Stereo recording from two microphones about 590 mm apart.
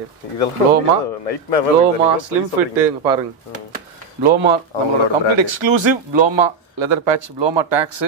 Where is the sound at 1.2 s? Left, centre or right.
Left.